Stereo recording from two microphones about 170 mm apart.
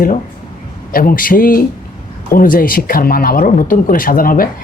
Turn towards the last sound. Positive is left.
turn(degrees=55)  # may be behind; listen again after turning